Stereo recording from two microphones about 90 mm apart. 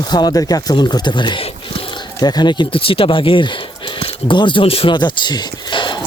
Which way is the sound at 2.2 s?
50° left (ahead or behind).